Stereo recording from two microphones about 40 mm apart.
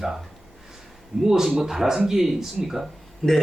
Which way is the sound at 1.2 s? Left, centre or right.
Centre.